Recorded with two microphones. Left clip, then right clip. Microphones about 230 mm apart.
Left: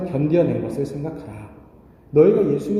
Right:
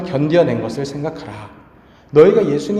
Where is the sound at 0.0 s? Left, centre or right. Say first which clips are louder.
Right 5 dB; centre.